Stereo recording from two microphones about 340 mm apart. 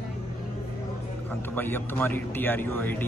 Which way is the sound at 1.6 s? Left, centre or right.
Centre.